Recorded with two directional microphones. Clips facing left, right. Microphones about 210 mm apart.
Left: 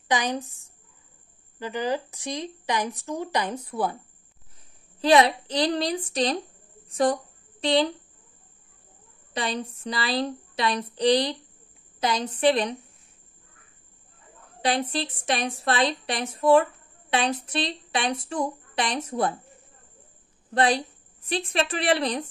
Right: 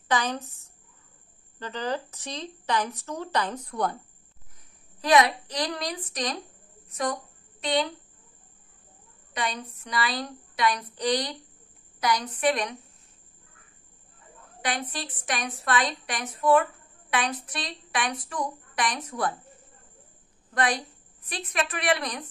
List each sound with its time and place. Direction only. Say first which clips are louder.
0.1 s speech: left 1 dB; 15° left (ahead or behind)
1.6 s speech: left 3 dB; 10° left (ahead or behind)
5.0 s a woman's voice: left 3 dB; 30° left (ahead or behind)
9.3 s a woman's voice: left 3 dB; 30° left (ahead or behind)
14.6 s a woman's voice: left 6 dB; 25° left (ahead or behind)
20.5 s a woman's voice: left 4 dB; 25° left (ahead or behind)